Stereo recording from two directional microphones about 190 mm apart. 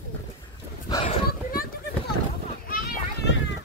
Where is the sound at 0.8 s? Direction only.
20° left (ahead or behind).